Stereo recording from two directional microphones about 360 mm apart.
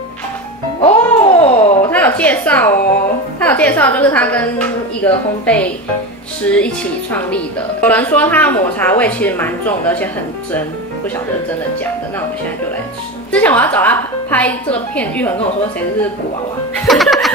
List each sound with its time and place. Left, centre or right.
0.7 s music: centre
1.9 s a woman's voice: centre
13.3 s a woman's voice: centre
16.8 s music: centre